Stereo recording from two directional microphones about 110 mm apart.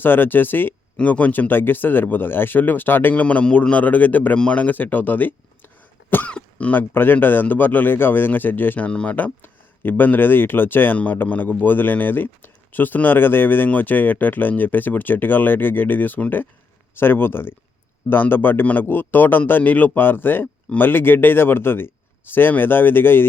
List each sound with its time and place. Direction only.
0.0 s a man's voice: 20° left (ahead or behind)